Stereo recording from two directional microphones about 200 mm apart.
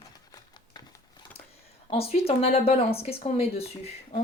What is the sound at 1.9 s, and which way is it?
Speech, 30° left (ahead or behind).